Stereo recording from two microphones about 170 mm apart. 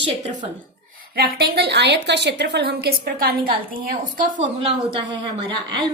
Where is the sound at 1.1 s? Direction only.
70° right (ahead or behind).